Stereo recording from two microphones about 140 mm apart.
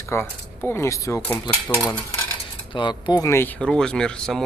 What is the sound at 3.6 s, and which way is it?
Speech, 5° left (ahead or behind).